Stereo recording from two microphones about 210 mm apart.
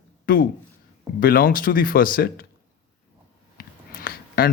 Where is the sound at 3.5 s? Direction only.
45° left (ahead or behind).